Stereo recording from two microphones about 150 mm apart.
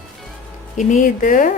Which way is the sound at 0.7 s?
60° left (ahead or behind).